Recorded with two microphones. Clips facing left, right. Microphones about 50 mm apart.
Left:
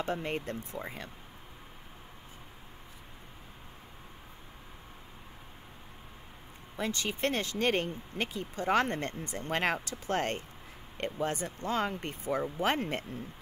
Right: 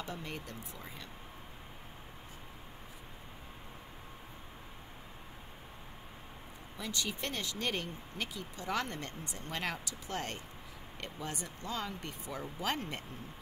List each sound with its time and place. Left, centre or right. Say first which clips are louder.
0.0 s speech: left 8 dB; left
6.8 s speech: left 6 dB; left